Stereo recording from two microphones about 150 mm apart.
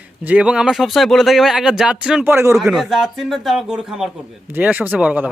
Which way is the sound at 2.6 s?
Centre (ahead or behind).